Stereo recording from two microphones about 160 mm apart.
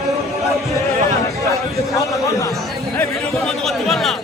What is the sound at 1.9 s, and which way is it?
Speech, 20° left (ahead or behind).